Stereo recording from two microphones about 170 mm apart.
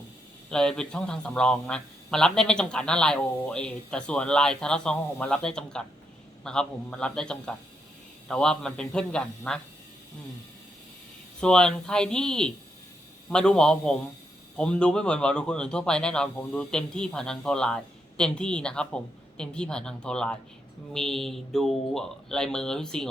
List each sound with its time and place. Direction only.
0.5 s a man's voice: 5° left (ahead or behind)
11.3 s a man's voice: 5° left (ahead or behind)